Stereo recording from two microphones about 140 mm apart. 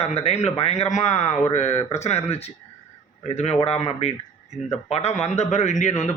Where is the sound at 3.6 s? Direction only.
50° left (ahead or behind).